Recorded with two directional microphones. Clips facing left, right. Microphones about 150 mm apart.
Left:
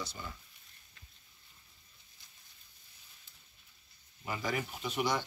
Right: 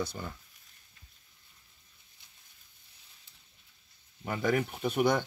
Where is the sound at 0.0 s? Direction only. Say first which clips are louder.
Right 7 dB; 55° right (ahead or behind).